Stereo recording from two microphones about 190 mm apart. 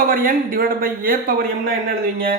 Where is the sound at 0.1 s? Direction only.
50° right (ahead or behind).